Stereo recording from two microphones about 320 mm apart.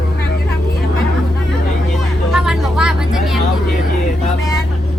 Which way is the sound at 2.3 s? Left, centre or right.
Centre.